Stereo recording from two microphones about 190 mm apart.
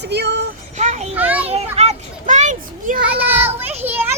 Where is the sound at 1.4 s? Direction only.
35° right (ahead or behind).